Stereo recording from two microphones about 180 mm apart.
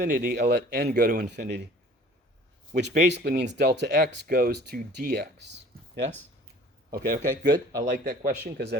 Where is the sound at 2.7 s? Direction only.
70° right (ahead or behind).